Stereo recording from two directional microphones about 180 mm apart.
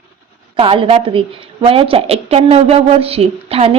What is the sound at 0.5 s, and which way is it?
A woman's voice, 30° right (ahead or behind).